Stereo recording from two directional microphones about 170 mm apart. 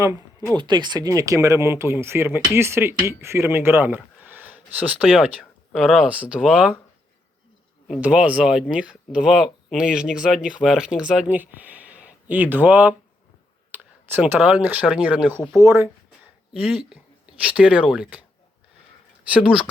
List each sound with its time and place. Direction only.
0.0 s speech: 20° right (ahead or behind)
5.0 s speech: centre (ahead or behind)
8.0 s speech: 10° right (ahead or behind)
19.3 s speech: 5° right (ahead or behind)